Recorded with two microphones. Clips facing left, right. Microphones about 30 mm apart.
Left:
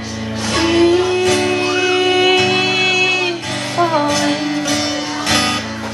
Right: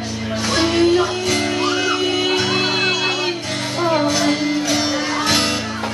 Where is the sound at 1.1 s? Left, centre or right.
Left.